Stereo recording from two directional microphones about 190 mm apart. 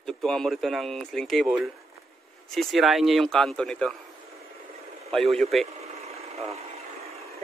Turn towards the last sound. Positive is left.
turn(degrees=-35)  # may be behind; listen again after turning